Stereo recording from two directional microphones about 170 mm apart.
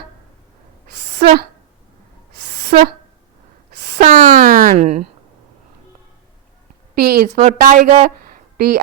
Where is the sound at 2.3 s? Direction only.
75° right (ahead or behind).